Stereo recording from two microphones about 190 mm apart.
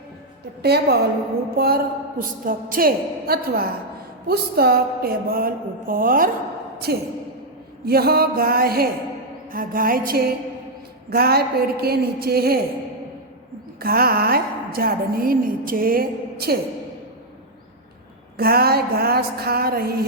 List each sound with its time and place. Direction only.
0.6 s a woman's voice: 60° right (ahead or behind)
13.7 s a woman's voice: 50° right (ahead or behind)
18.3 s a woman's voice: 55° right (ahead or behind)